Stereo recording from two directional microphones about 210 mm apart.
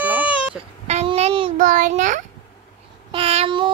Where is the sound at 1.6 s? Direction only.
40° right (ahead or behind).